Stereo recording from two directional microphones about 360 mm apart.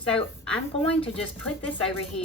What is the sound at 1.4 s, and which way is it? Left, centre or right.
Speech, centre.